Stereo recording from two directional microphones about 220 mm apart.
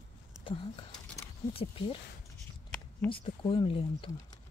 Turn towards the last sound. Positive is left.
turn(degrees=25)  # may be behind; listen again after turning